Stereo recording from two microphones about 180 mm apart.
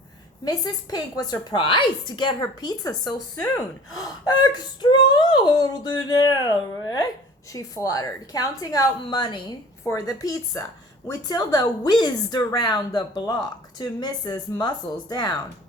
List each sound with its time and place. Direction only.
0.4 s a woman's voice: 20° left (ahead or behind)